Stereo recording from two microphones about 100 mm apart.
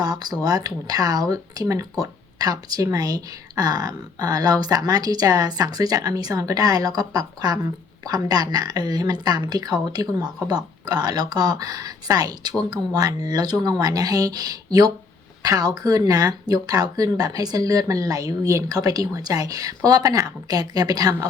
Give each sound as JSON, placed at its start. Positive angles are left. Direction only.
{"t": 0.0, "sound": "speech", "side_deg": -40}